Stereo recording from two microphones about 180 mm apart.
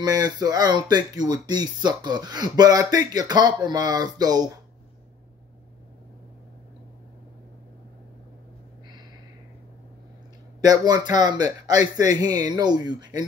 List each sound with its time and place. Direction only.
0.0 s speech: 20° right (ahead or behind)
10.6 s speech: 20° right (ahead or behind)